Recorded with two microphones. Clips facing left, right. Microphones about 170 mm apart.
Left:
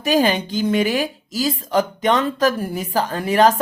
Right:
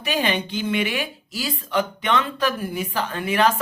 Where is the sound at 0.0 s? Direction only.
40° left (ahead or behind).